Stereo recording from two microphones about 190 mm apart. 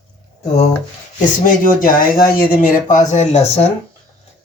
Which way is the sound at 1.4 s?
50° left (ahead or behind).